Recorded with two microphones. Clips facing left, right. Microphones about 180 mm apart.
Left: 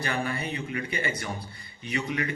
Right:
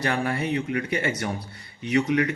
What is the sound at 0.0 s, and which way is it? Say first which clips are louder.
A man's voice: right 5 dB; 75° right (ahead or behind).